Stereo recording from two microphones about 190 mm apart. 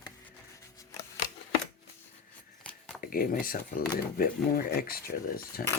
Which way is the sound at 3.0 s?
50° left (ahead or behind).